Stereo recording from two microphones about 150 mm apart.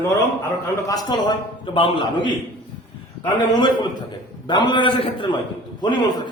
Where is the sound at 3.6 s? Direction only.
30° left (ahead or behind).